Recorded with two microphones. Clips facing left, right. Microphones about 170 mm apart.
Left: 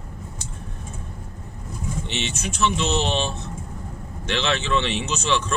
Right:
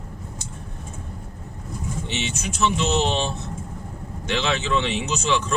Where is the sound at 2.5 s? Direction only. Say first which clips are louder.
Right 1 dB; 15° right (ahead or behind).